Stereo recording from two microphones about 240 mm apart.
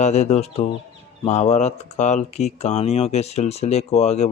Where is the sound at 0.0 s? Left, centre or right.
Left.